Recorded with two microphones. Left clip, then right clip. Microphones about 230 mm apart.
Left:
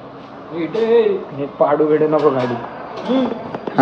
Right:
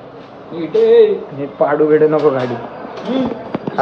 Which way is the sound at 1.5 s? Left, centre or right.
Left.